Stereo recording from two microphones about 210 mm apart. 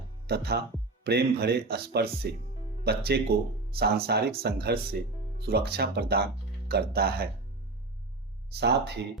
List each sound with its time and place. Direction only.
0.3 s speech: 50° right (ahead or behind)
8.6 s speech: 55° right (ahead or behind)